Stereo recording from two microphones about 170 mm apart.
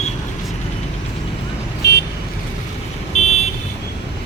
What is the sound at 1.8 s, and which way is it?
Vehicle, 75° left (ahead or behind).